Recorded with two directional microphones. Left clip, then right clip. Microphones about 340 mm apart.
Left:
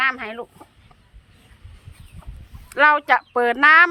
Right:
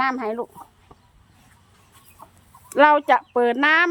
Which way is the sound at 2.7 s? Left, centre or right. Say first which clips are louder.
Even; centre.